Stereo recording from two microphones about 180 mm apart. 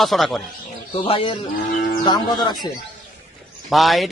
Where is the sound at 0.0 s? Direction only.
Centre (ahead or behind).